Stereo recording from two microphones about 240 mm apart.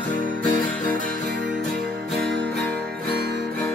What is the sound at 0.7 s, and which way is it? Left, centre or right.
Music, centre.